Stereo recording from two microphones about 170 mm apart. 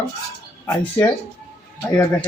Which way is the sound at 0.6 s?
20° left (ahead or behind).